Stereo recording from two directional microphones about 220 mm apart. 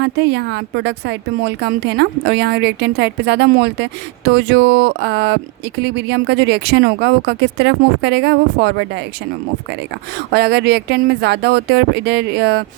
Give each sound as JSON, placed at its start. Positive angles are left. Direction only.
{"t": 0.0, "sound": "speech", "side_deg": -50}
{"t": 10.3, "sound": "speech", "side_deg": -45}